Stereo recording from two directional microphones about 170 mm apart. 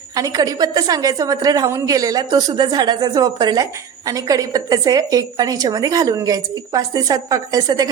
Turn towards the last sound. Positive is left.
turn(degrees=-20)  # may be behind; listen again after turning